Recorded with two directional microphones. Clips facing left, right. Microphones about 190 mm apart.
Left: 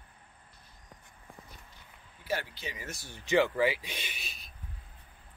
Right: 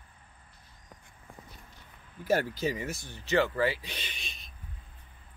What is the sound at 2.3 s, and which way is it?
Speech, 45° right (ahead or behind).